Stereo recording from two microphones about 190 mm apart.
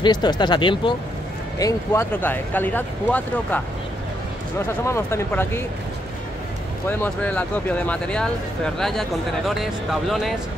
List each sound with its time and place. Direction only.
0.0 s speech: 20° left (ahead or behind)
1.6 s speech: 15° left (ahead or behind)
4.8 s speech: 15° left (ahead or behind)
6.9 s speech: 10° left (ahead or behind)